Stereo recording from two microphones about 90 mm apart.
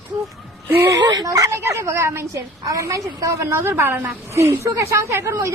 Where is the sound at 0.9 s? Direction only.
45° right (ahead or behind).